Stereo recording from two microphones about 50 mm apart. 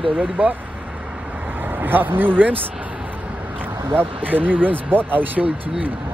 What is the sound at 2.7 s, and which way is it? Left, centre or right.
Speech, right.